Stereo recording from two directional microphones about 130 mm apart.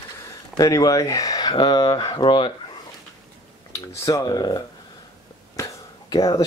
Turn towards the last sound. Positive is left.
turn(degrees=30)  # may be behind; listen again after turning